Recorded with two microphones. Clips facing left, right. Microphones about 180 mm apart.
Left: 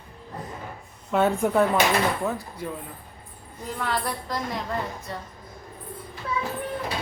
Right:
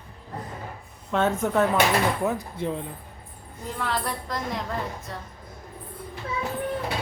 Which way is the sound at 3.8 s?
Centre (ahead or behind).